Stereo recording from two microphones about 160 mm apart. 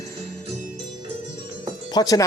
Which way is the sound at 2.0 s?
25° left (ahead or behind).